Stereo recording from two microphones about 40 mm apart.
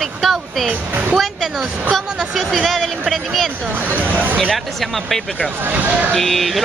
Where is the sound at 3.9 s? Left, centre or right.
Right.